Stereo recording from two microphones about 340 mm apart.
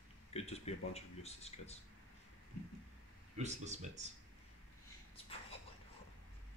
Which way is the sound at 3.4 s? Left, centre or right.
Centre.